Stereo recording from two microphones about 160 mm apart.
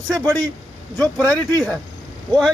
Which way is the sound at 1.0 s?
20° right (ahead or behind).